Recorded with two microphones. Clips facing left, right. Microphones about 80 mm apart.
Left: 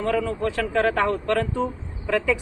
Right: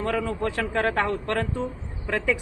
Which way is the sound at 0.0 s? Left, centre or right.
Right.